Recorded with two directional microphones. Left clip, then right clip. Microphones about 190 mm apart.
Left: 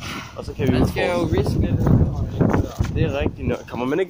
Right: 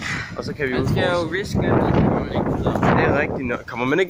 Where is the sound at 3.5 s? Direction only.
25° left (ahead or behind).